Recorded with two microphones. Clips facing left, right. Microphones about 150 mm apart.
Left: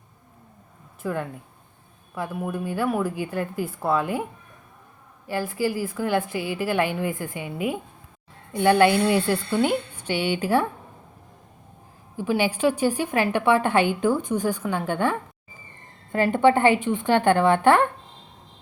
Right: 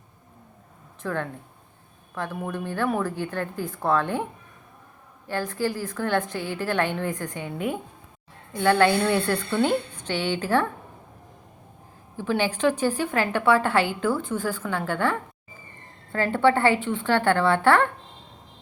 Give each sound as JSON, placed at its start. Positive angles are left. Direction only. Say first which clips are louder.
{"t": 1.0, "sound": "a woman's voice", "louder": "left 1 dB", "side_deg": 5}
{"t": 5.3, "sound": "a woman's voice", "louder": "left 2 dB", "side_deg": 10}
{"t": 12.1, "sound": "a woman's voice", "louder": "left 2 dB", "side_deg": 10}